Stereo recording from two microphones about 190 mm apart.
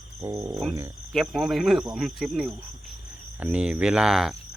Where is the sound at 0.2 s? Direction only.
15° right (ahead or behind).